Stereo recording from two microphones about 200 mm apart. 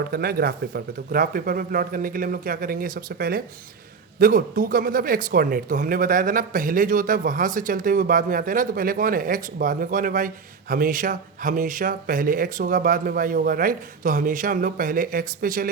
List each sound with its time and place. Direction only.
0.0 s speech: 50° right (ahead or behind)